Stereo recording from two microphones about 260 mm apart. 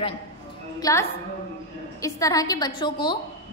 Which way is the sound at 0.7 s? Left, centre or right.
Centre.